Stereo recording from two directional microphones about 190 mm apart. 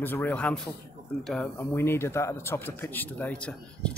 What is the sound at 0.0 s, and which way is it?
Speech, 10° left (ahead or behind).